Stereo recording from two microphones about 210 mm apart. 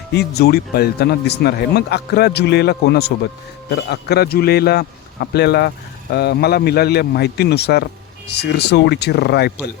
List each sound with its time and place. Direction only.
0.1 s a man's voice: 50° left (ahead or behind)